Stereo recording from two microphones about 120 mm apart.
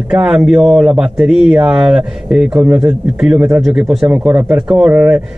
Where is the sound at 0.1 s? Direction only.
5° right (ahead or behind).